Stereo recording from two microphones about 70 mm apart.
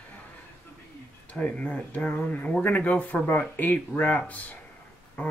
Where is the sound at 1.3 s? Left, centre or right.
Centre.